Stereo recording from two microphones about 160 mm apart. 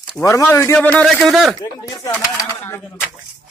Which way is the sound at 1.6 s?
20° left (ahead or behind).